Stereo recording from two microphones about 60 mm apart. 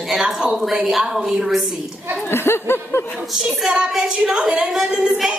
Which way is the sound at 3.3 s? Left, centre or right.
Centre.